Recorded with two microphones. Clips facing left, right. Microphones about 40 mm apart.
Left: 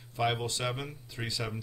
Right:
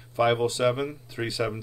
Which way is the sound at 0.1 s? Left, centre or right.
Centre.